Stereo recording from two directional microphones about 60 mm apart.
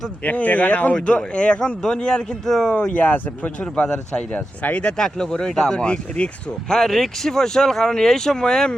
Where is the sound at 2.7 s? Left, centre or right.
Left.